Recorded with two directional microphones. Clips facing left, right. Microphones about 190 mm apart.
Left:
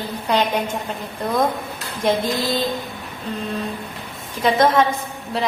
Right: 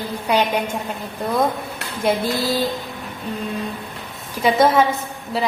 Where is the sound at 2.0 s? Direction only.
5° right (ahead or behind).